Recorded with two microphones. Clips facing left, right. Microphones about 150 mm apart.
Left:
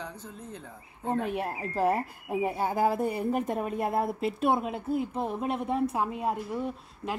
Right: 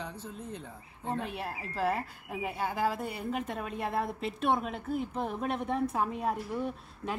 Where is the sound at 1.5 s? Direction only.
45° left (ahead or behind).